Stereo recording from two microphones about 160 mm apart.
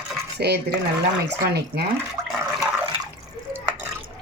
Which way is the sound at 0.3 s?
90° right.